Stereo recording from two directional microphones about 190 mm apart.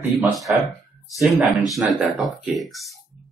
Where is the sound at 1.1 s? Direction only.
Centre (ahead or behind).